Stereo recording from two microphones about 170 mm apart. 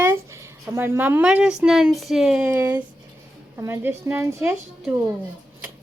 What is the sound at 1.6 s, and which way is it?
Speech, 5° right (ahead or behind).